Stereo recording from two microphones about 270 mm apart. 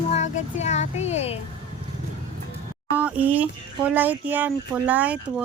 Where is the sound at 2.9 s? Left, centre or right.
Centre.